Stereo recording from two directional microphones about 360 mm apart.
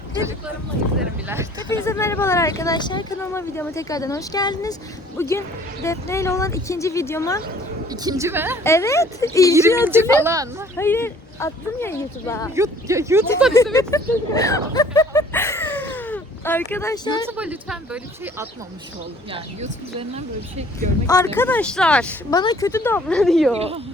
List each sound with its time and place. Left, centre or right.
0.9 s speech: centre
1.7 s speech: centre
7.9 s speech: centre
8.6 s speech: centre
9.6 s speech: centre
10.8 s speech: centre
12.5 s speech: centre
13.3 s speech: centre
17.2 s speech: centre
19.3 s speech: centre
21.1 s speech: centre
23.6 s speech: centre